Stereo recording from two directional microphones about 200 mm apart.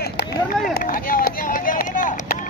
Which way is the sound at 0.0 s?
50° left (ahead or behind).